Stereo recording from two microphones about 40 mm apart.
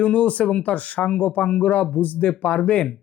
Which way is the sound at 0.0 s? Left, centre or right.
Left.